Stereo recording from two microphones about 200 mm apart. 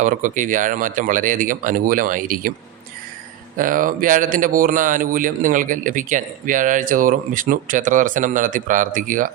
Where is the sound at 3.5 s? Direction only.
45° right (ahead or behind).